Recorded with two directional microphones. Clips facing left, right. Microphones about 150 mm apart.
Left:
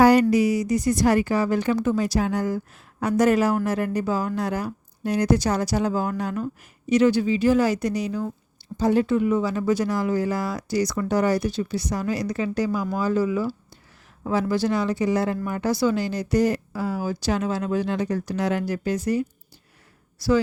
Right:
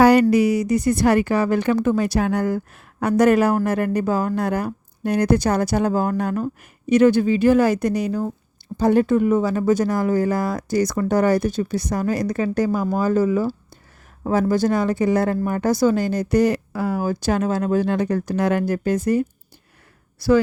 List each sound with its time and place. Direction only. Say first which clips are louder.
0.0 s a woman's voice: right 2 dB; 65° right (ahead or behind)